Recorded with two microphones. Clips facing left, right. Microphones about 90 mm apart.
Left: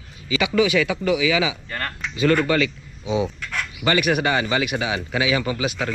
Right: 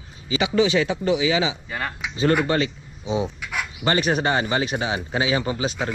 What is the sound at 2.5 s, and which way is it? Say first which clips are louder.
Speech: left 2 dB; 35° right (ahead or behind).